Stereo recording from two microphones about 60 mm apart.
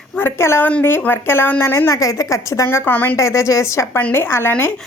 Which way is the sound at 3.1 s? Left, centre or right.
Left.